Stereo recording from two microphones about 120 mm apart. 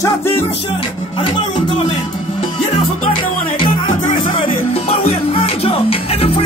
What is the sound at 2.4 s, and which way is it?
Music, 50° left (ahead or behind).